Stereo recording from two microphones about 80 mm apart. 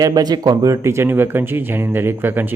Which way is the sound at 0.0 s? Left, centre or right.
Right.